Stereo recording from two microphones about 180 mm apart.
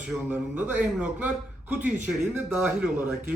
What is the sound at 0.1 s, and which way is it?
A man's voice, 10° right (ahead or behind).